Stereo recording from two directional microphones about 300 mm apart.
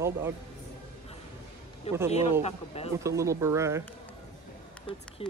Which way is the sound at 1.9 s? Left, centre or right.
Left.